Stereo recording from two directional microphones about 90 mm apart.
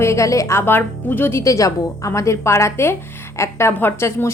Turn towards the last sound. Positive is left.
turn(degrees=25)  # may be behind; listen again after turning